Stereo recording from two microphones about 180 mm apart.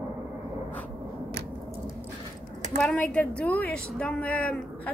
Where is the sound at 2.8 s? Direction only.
5° left (ahead or behind).